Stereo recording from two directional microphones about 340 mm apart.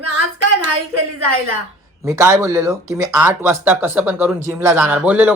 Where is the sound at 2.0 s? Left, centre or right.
Centre.